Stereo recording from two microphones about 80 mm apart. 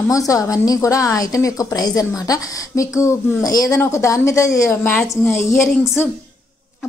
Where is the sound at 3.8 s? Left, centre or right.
Left.